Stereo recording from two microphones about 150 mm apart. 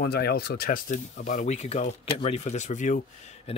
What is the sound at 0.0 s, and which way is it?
Speech, 90° left.